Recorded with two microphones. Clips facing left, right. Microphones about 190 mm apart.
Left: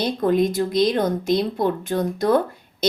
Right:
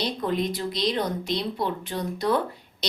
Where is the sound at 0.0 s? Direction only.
50° left (ahead or behind).